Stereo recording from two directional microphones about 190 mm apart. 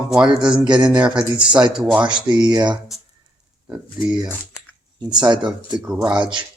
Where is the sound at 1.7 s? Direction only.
5° right (ahead or behind).